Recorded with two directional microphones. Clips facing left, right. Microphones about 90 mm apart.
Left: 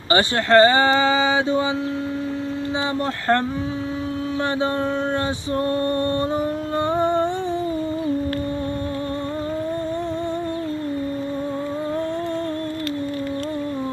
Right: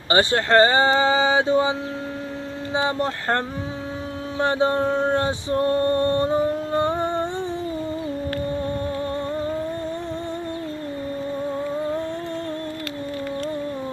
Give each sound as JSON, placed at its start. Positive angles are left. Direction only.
{"t": 0.1, "sound": "speech", "side_deg": -25}
{"t": 2.7, "sound": "speech", "side_deg": -30}
{"t": 4.4, "sound": "a sound", "side_deg": -30}